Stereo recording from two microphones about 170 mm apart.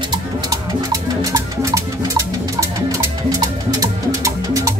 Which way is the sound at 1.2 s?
20° right (ahead or behind).